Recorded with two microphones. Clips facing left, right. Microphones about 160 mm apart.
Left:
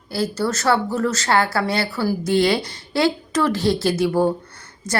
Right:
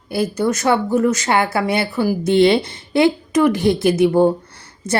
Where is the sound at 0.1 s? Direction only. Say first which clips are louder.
Right 4 dB; 20° right (ahead or behind).